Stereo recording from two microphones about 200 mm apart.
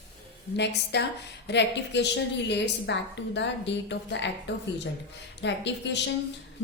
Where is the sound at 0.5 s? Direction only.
60° left (ahead or behind).